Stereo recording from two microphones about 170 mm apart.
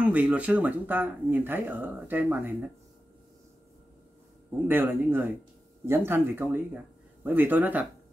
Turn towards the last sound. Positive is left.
turn(degrees=-10)  # may be behind; listen again after turning